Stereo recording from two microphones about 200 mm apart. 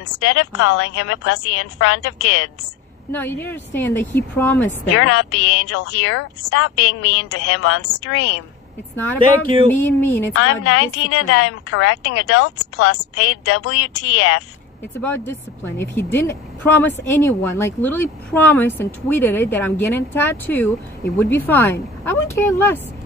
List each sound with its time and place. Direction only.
0.2 s a woman's voice: 80° left
3.1 s speech: 10° left (ahead or behind)
5.7 s a woman's voice: 90° left
8.9 s speech: 10° left (ahead or behind)
10.3 s a woman's voice: 90° left
15.0 s speech: 10° left (ahead or behind)